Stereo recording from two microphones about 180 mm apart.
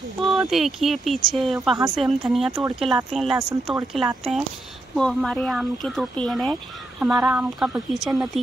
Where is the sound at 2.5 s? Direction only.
15° right (ahead or behind).